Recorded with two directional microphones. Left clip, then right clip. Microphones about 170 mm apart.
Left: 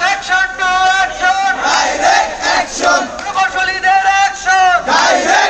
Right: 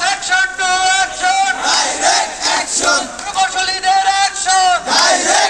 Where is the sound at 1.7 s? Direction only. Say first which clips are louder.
Left 3 dB; 10° left (ahead or behind).